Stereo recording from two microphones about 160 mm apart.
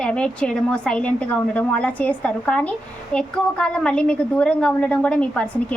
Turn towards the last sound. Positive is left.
turn(degrees=5)  # may be behind; listen again after turning